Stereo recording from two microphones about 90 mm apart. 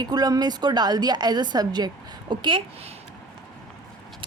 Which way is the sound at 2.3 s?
60° right (ahead or behind).